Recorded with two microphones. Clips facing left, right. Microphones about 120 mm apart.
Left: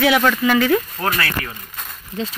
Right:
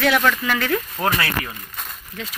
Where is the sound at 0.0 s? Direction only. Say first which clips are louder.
Left 3 dB; 5° left (ahead or behind).